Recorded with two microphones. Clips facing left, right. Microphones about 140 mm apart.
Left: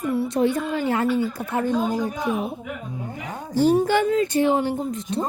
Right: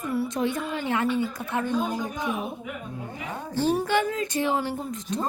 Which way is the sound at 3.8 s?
30° left (ahead or behind).